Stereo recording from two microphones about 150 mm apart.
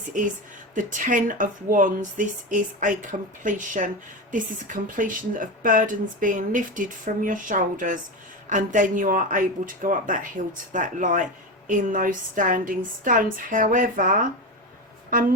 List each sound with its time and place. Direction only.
0.7 s speech: 60° right (ahead or behind)